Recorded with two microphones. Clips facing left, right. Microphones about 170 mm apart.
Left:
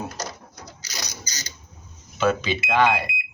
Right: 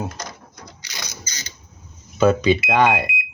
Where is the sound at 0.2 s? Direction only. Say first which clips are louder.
Left 1 dB; 40° left (ahead or behind).